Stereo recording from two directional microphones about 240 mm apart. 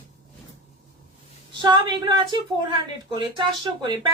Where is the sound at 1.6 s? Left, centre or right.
Centre.